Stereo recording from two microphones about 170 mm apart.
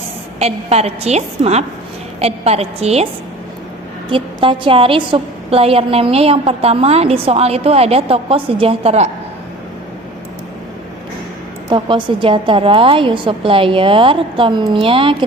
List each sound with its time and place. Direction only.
0.3 s a woman's voice: 40° right (ahead or behind)
4.1 s a woman's voice: 30° right (ahead or behind)
11.7 s a woman's voice: 30° right (ahead or behind)